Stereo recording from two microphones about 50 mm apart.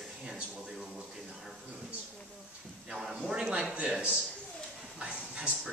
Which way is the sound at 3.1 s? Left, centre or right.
Centre.